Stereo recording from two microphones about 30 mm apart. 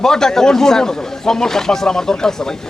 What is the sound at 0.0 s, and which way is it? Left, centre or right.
Speech, centre.